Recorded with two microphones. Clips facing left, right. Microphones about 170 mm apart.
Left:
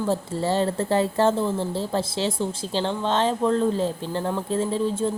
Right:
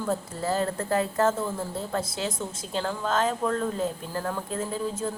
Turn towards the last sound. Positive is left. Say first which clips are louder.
# left 6 dB
turn(degrees=30)  # may be behind; listen again after turning